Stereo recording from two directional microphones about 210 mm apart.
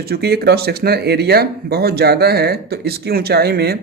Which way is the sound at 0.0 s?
50° right (ahead or behind).